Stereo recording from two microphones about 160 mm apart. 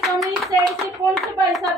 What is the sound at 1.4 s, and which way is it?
Speech, centre (ahead or behind).